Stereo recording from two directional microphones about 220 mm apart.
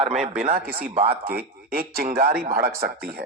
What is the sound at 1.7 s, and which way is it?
Speech, 45° right (ahead or behind).